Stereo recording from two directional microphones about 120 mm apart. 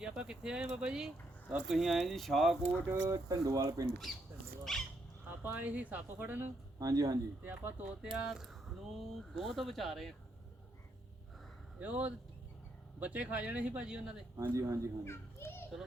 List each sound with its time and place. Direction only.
0.0 s speech: 5° right (ahead or behind)
2.8 s speech: 25° right (ahead or behind)
4.1 s speech: centre (ahead or behind)
5.4 s speech: 15° right (ahead or behind)
6.7 s speech: 30° right (ahead or behind)
7.4 s speech: 15° right (ahead or behind)
8.1 s speech: centre (ahead or behind)
11.8 s speech: 15° right (ahead or behind)
14.3 s speech: 25° right (ahead or behind)
15.0 s a child's voice: 20° left (ahead or behind)